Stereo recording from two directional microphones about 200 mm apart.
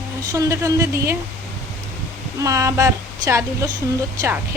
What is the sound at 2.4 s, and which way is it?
Speech, 15° right (ahead or behind).